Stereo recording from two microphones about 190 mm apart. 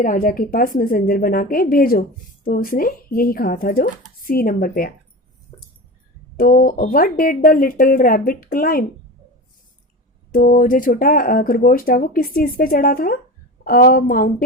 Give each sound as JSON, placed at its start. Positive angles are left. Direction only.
{"t": 0.0, "sound": "speech", "side_deg": 45}
{"t": 6.3, "sound": "speech", "side_deg": 50}
{"t": 10.3, "sound": "speech", "side_deg": 45}